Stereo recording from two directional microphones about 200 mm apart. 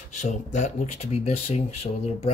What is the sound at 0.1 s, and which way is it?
Speech, 35° left (ahead or behind).